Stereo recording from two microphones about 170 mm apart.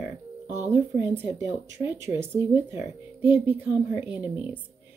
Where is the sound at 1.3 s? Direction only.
15° right (ahead or behind).